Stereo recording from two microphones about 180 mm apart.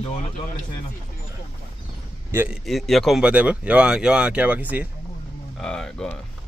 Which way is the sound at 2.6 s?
Centre (ahead or behind).